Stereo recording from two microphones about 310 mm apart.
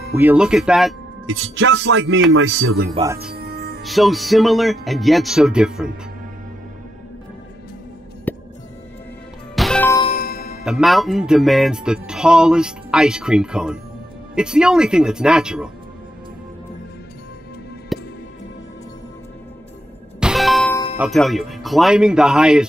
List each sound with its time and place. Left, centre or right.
0.1 s speech: centre
1.2 s music: right
2.9 s speech: centre
3.3 s music: right
3.8 s speech: centre
8.3 s music: centre
9.6 s music: centre
10.0 s music: left
10.6 s speech: centre
17.9 s music: centre
20.2 s music: centre
21.0 s speech: centre